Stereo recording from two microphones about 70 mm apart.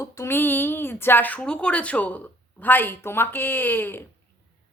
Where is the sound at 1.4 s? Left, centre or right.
Centre; by 4.0 s left.